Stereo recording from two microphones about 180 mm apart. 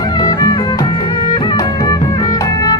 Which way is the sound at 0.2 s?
20° left (ahead or behind).